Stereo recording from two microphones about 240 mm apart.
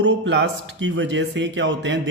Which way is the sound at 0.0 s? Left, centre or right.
Right.